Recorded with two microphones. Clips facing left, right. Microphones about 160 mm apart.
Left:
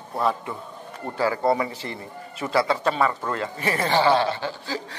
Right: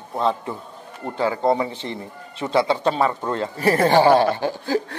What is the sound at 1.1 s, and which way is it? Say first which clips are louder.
A man's voice: right 2 dB; 20° right (ahead or behind).